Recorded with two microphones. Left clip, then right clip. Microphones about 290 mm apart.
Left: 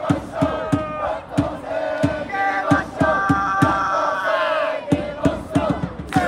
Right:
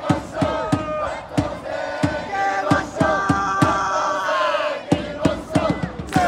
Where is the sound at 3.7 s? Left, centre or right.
Centre.